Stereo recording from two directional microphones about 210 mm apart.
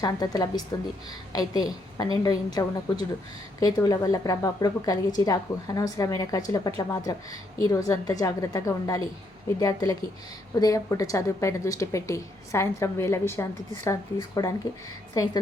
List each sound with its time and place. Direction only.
0.0 s a woman's voice: 20° left (ahead or behind)